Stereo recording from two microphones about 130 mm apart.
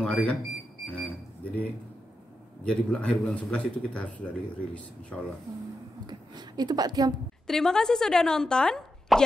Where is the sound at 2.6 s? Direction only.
10° left (ahead or behind).